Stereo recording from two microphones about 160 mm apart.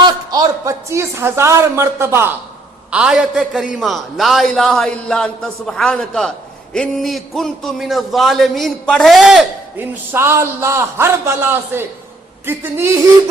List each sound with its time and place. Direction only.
0.0 s a man's voice: 25° right (ahead or behind)
2.9 s a man's voice: 5° right (ahead or behind)
9.7 s a man's voice: 15° right (ahead or behind)